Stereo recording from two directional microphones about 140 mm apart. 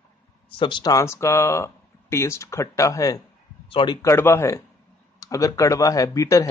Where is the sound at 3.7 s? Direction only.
40° left (ahead or behind).